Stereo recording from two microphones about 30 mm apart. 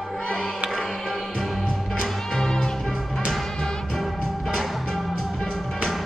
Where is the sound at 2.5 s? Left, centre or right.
Left.